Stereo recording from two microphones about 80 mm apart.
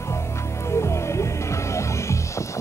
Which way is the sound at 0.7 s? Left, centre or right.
Left.